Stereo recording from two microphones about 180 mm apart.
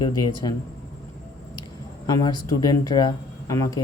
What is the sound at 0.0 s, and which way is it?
Speech, 25° left (ahead or behind).